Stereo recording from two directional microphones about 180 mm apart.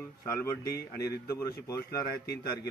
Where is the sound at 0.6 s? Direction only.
60° left (ahead or behind).